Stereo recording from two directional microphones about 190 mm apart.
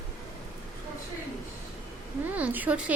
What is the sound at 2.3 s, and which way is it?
Speech, 10° right (ahead or behind).